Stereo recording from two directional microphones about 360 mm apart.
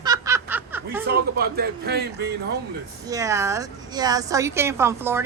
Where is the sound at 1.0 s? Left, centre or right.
Right.